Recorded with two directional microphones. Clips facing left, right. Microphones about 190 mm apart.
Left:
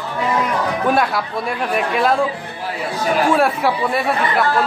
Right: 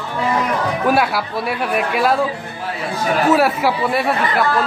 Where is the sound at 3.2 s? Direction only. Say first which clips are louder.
Right 2 dB; 5° right (ahead or behind).